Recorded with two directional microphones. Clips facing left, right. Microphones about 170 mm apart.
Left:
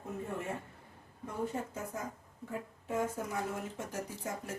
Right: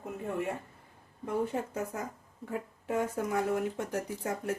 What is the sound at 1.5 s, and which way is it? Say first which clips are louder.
Speech: right 4 dB; 70° right (ahead or behind).